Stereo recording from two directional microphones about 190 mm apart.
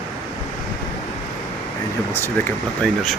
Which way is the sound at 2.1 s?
10° left (ahead or behind).